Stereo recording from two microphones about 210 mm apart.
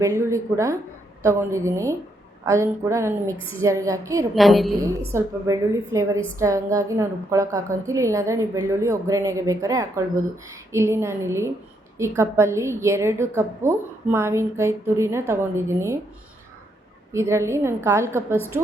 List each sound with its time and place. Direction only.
0.0 s a woman's voice: 15° right (ahead or behind)
4.4 s a woman's voice: centre (ahead or behind)
4.8 s a woman's voice: 15° right (ahead or behind)
17.1 s a woman's voice: 15° right (ahead or behind)